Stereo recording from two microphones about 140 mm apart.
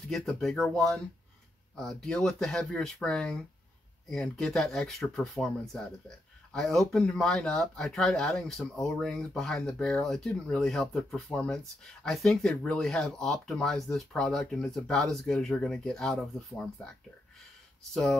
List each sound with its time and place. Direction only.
0.1 s speech: 5° left (ahead or behind)